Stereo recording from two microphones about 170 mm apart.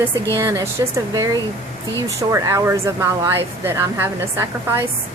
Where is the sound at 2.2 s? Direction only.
20° right (ahead or behind).